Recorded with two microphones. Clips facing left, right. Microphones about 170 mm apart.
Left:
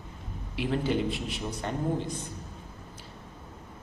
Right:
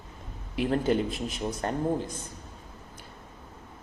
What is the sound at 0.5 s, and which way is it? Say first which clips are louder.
A man's voice: right 3 dB; 45° right (ahead or behind).